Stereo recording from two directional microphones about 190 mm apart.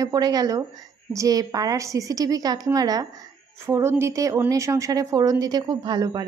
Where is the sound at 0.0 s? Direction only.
20° right (ahead or behind).